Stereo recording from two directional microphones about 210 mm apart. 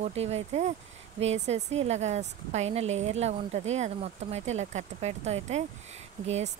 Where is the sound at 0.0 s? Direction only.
30° right (ahead or behind).